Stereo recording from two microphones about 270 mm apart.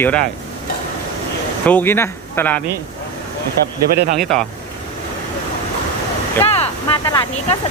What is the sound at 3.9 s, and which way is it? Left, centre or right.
Speech, right.